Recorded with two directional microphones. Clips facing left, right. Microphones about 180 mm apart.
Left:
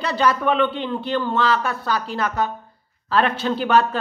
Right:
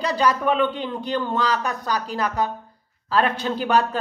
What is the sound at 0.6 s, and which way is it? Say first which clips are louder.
Speech: left 1 dB; 40° right (ahead or behind).